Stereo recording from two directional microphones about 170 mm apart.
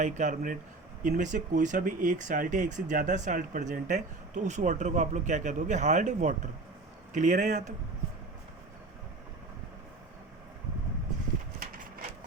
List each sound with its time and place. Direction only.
0.0 s speech: 45° right (ahead or behind)